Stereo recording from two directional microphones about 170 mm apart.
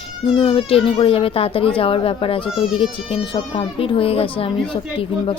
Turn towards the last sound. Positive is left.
turn(degrees=30)  # may be behind; listen again after turning